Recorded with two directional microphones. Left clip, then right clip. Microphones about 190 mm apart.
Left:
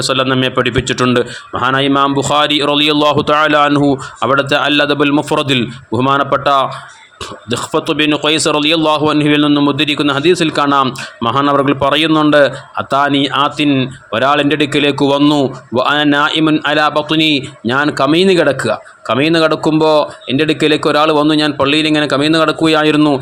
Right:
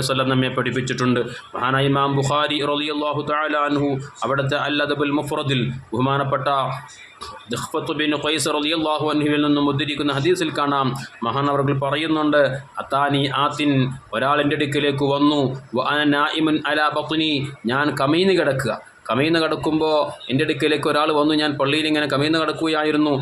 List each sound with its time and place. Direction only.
0.0 s a man's voice: 40° left (ahead or behind)